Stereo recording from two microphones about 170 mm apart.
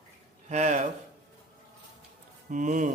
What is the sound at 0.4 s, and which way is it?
Speech, 40° right (ahead or behind).